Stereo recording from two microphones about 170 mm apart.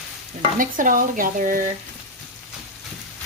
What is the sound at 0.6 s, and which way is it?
Speech, 55° right (ahead or behind).